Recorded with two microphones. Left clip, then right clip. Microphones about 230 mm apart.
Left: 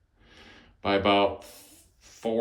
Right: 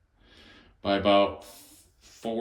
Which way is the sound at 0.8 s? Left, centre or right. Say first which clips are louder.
Even; left.